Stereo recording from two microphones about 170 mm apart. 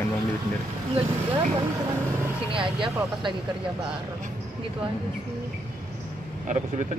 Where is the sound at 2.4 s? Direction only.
30° right (ahead or behind).